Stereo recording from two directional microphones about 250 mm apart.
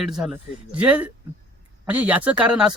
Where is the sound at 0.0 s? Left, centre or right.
Centre.